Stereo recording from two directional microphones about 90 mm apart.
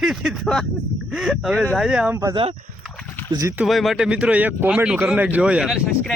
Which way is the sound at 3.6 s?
Centre (ahead or behind).